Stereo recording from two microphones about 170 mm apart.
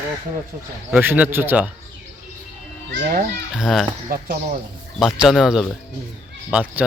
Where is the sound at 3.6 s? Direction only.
Centre (ahead or behind).